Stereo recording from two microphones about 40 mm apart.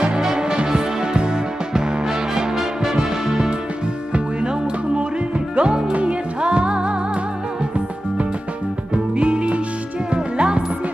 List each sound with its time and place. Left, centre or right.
0.2 s music: centre
5.6 s music: right
8.9 s music: right